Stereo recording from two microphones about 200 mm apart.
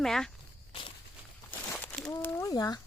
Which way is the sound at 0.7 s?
25° left (ahead or behind).